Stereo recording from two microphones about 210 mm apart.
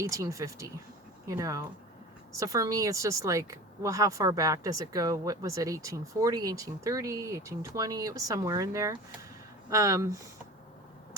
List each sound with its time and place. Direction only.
0.0 s speech: 15° right (ahead or behind)